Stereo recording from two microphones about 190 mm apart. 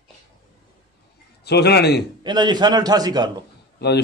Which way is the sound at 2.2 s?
25° right (ahead or behind).